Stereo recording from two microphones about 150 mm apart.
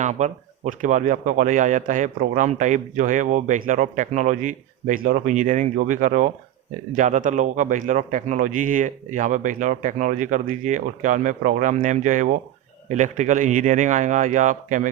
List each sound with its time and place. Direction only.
0.0 s speech: 55° right (ahead or behind)